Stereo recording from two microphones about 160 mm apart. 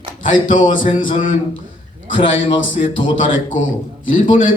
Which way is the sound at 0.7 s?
55° left (ahead or behind).